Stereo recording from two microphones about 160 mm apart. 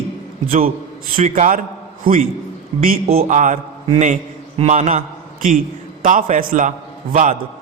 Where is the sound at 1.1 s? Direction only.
55° right (ahead or behind).